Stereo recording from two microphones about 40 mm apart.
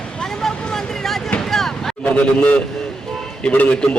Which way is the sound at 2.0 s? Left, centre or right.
Left.